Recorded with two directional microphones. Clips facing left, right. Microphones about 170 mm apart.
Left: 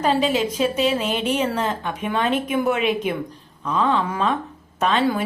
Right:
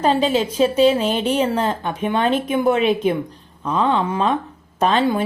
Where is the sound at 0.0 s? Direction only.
30° right (ahead or behind).